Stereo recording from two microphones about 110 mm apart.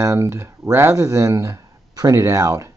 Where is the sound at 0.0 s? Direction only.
25° right (ahead or behind).